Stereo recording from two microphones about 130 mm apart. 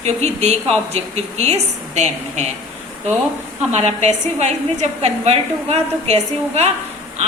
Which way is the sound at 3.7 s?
55° right (ahead or behind).